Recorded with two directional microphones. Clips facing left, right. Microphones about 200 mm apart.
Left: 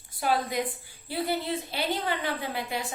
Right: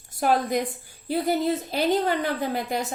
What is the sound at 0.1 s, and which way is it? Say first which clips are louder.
A woman's voice: right 5 dB; 45° right (ahead or behind).